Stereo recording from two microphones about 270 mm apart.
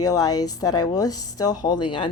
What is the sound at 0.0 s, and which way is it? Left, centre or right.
A woman's voice, centre.